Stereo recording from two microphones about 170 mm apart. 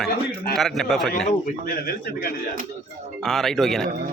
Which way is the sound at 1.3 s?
55° left (ahead or behind).